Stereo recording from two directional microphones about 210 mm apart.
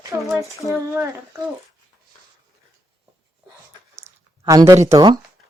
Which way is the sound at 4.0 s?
15° right (ahead or behind).